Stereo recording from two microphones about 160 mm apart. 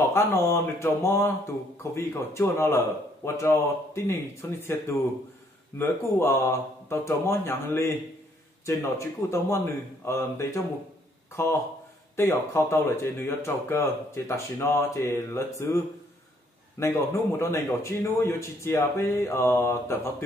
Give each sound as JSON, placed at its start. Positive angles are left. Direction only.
{"t": 0.0, "sound": "speech", "side_deg": 15}
{"t": 16.8, "sound": "speech", "side_deg": 15}